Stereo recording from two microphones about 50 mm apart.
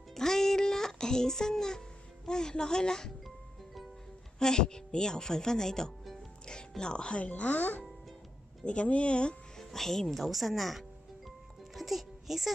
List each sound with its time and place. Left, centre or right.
0.1 s music: centre
2.2 s a woman's voice: centre
4.4 s a woman's voice: centre
9.6 s speech: centre
11.7 s music: centre